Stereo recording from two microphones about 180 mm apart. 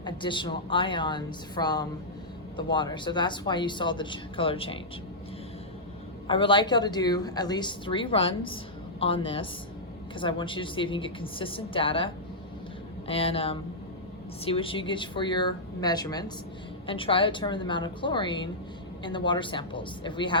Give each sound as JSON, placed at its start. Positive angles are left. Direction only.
{"t": 0.0, "sound": "speech", "side_deg": 25}
{"t": 6.2, "sound": "speech", "side_deg": 25}